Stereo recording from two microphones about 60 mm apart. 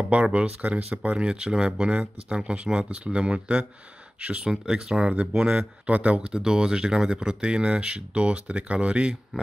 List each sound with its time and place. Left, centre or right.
0.1 s speech: right
4.5 s speech: centre